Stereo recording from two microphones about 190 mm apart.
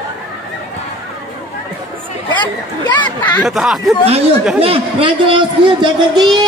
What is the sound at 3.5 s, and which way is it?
Speech, centre (ahead or behind).